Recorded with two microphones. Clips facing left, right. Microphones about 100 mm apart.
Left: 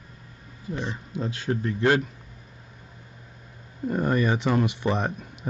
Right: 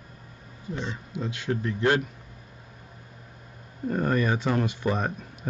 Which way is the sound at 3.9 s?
10° left (ahead or behind).